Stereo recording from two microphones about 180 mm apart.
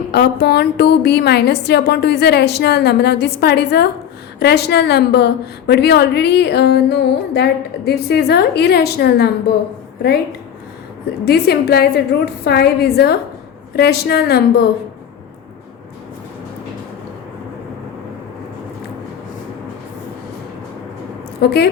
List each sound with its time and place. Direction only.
0.1 s a woman's voice: 60° left (ahead or behind)
11.0 s a woman's voice: 65° left (ahead or behind)
21.4 s a woman's voice: 60° left (ahead or behind)